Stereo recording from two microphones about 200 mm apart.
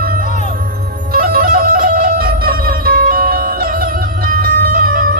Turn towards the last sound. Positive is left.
turn(degrees=-45)  # may be behind; listen again after turning